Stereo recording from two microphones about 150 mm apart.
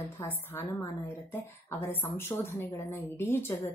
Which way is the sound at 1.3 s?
15° left (ahead or behind).